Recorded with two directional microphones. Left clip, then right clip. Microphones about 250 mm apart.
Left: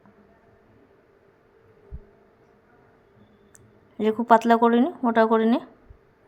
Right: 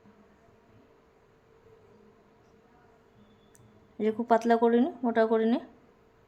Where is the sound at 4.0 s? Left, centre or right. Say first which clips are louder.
Left 7 dB; centre.